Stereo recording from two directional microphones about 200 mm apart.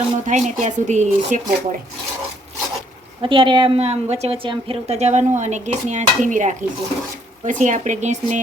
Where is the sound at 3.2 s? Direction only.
25° right (ahead or behind).